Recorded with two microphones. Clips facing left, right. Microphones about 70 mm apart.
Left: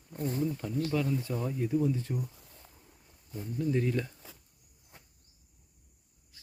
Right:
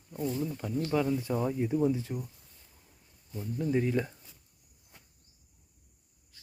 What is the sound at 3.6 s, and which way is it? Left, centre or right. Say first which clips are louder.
Speech: right 1 dB; centre.